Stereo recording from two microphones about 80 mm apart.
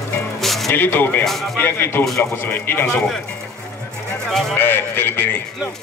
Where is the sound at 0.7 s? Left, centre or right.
Left.